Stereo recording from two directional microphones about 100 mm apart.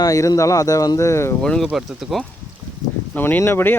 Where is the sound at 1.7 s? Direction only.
5° right (ahead or behind).